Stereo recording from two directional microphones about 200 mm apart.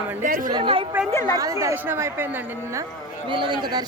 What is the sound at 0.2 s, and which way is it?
Speech, 40° right (ahead or behind).